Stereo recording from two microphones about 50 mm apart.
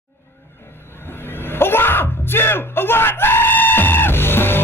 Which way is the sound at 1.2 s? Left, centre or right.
Left.